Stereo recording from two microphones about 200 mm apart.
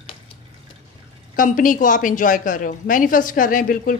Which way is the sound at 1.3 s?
40° left (ahead or behind).